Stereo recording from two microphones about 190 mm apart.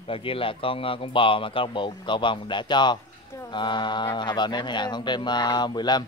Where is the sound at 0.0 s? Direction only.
30° left (ahead or behind).